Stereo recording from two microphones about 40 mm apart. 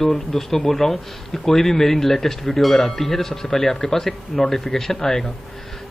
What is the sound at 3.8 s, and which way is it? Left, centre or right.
Speech, left.